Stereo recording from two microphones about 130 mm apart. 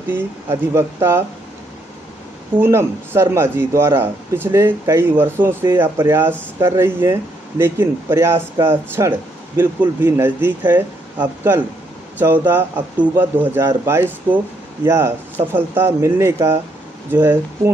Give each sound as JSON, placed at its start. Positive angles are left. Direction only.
{"t": 0.1, "sound": "speech", "side_deg": -20}
{"t": 2.6, "sound": "speech", "side_deg": -20}